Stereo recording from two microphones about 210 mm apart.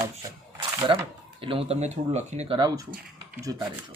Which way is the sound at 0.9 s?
25° right (ahead or behind).